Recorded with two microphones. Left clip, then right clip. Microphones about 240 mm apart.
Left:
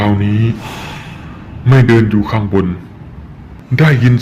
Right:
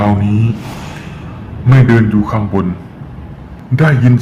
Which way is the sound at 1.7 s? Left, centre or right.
Left.